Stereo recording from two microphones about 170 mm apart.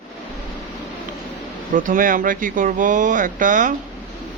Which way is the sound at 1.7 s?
50° right (ahead or behind).